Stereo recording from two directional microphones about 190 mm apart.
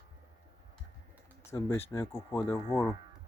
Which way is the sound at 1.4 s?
15° left (ahead or behind).